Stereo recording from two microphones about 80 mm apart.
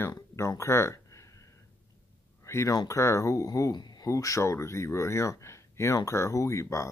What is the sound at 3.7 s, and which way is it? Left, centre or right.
Speech, left.